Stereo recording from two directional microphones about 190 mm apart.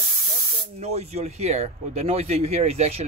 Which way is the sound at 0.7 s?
35° right (ahead or behind).